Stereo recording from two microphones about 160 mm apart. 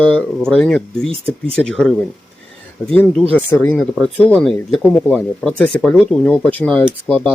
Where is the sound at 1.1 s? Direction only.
35° right (ahead or behind).